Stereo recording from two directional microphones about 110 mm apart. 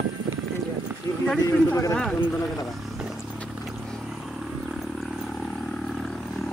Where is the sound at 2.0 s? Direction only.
Centre (ahead or behind).